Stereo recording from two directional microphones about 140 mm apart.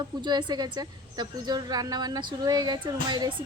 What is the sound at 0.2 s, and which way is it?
A woman's voice, 30° right (ahead or behind).